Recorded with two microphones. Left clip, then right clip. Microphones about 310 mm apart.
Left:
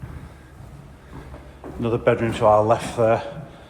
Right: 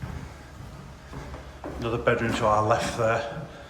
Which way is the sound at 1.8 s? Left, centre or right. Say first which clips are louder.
Left 5 dB; centre.